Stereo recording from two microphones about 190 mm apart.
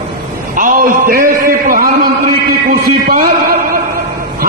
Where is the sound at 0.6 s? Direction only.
45° right (ahead or behind).